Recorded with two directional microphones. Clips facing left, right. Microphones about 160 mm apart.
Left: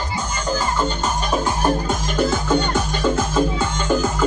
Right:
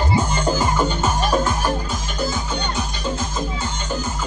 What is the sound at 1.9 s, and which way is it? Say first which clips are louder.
Music: left 5 dB; 55° left (ahead or behind).